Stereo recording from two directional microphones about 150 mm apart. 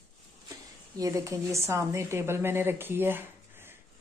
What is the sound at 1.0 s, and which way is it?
A woman's voice, 20° right (ahead or behind).